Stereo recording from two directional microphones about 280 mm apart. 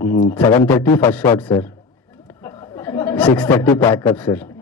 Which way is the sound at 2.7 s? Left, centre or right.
Centre.